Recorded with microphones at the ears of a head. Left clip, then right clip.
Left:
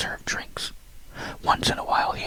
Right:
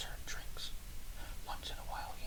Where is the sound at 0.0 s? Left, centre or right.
Left.